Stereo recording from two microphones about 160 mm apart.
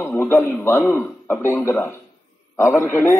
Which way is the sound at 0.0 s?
10° left (ahead or behind).